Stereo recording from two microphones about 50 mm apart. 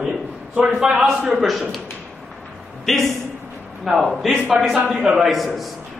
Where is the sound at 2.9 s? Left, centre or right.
Centre.